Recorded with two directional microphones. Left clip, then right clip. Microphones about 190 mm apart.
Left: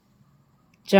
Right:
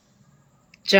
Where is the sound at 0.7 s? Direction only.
50° left (ahead or behind).